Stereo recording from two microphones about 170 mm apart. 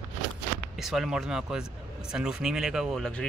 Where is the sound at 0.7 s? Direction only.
Centre (ahead or behind).